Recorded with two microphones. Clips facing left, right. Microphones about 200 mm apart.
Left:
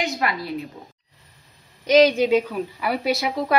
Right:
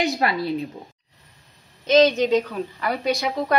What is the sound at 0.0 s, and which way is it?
Speech, 30° right (ahead or behind).